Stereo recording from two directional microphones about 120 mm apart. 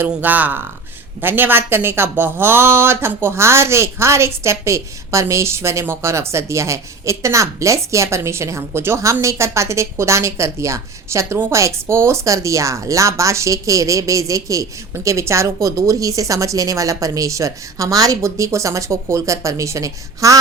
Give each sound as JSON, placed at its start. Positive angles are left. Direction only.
{"t": 0.0, "sound": "a woman's voice", "side_deg": -15}